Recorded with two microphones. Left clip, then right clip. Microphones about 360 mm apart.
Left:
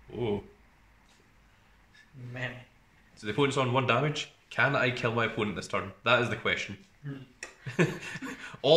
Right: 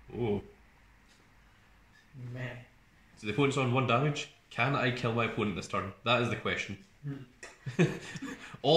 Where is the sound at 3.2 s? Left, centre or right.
Left.